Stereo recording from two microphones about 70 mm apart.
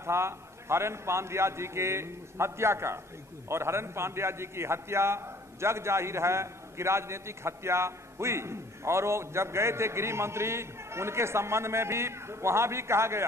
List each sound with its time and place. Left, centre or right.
0.0 s a man's voice: right